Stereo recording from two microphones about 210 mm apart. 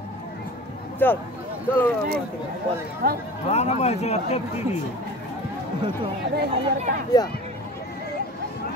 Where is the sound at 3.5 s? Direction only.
30° left (ahead or behind).